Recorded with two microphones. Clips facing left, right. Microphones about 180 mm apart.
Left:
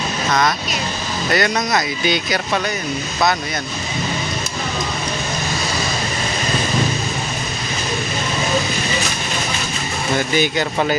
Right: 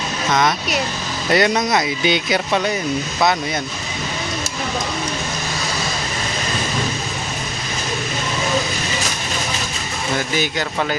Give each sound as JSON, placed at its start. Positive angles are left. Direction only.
{"t": 1.3, "sound": "speech", "side_deg": -25}
{"t": 10.3, "sound": "speech", "side_deg": 0}